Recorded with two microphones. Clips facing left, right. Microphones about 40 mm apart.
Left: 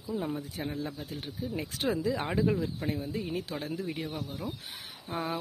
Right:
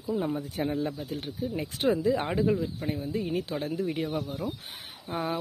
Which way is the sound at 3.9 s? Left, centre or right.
Right.